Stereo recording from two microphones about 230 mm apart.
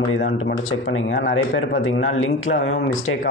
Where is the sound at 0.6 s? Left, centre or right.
Left.